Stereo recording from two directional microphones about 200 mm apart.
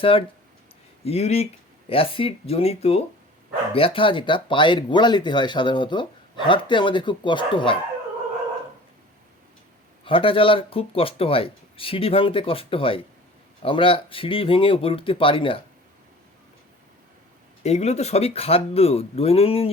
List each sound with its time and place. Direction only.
0.0 s speech: 25° left (ahead or behind)
10.0 s speech: 25° left (ahead or behind)
17.6 s speech: 35° left (ahead or behind)